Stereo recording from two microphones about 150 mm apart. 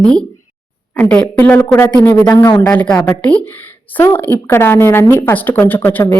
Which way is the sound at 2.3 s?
20° left (ahead or behind).